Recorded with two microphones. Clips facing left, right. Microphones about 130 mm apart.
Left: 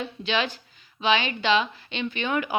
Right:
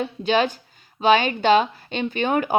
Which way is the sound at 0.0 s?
45° right (ahead or behind).